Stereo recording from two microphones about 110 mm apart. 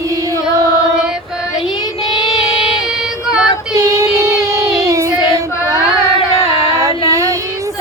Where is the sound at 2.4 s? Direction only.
55° left (ahead or behind).